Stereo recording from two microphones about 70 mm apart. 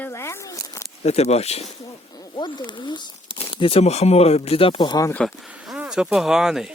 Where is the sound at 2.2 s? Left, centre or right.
Left.